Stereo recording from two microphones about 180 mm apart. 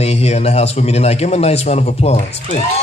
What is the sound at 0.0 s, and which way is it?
A man's voice, 35° left (ahead or behind).